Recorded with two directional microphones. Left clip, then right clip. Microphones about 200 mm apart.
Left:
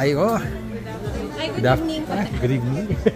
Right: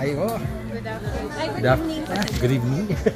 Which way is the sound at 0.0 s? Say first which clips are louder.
Left 5 dB; 55° left (ahead or behind).